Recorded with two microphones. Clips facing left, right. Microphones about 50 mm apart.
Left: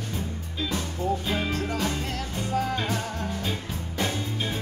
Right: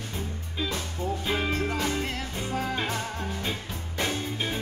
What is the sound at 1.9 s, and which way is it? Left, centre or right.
Music, right.